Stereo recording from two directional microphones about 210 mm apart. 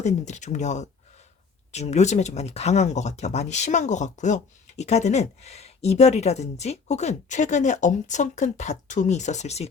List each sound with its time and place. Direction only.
0.0 s speech: 35° left (ahead or behind)